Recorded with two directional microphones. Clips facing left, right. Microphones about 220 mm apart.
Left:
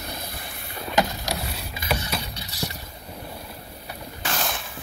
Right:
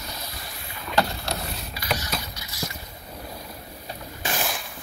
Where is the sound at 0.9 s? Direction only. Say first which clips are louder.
Left 1 dB; 15° left (ahead or behind).